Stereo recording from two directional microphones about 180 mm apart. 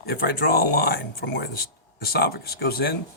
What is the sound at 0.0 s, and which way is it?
Speech, 60° left (ahead or behind).